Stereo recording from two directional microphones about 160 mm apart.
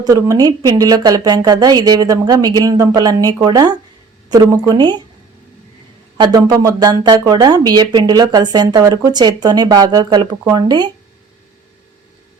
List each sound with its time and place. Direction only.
0.0 s speech: 20° right (ahead or behind)
6.1 s speech: 25° right (ahead or behind)